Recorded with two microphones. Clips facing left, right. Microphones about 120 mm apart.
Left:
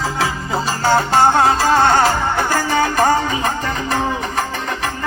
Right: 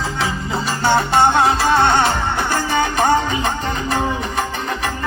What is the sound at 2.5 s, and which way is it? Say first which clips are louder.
Music: left 1 dB; 40° left (ahead or behind).